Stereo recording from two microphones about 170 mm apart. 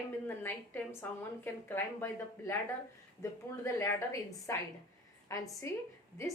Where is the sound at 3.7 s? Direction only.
15° left (ahead or behind).